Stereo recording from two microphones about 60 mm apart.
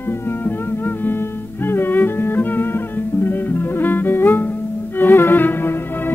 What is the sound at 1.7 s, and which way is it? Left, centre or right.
Music, left.